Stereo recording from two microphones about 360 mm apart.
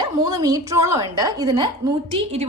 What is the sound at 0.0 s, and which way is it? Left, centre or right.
A woman's voice, centre.